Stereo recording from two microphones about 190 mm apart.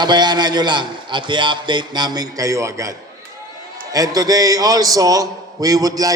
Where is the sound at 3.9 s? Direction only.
20° right (ahead or behind).